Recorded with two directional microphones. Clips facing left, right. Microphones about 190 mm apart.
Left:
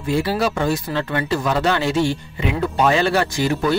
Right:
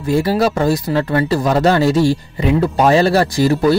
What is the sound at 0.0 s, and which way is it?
Speech, 40° right (ahead or behind).